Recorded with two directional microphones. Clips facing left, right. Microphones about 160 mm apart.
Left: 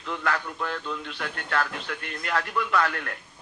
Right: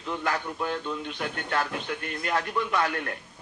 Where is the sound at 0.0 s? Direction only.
25° right (ahead or behind).